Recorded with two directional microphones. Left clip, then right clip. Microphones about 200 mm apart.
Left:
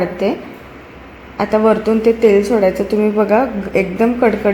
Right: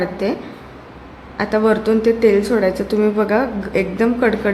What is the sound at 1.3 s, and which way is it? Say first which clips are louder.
A woman's voice: left 3 dB; 10° left (ahead or behind).